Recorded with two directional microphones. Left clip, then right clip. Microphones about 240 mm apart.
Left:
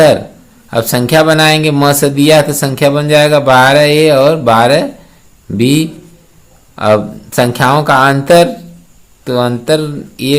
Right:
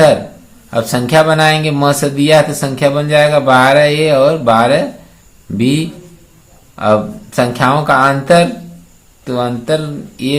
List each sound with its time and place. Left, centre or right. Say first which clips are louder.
0.7 s speech: left 2 dB; left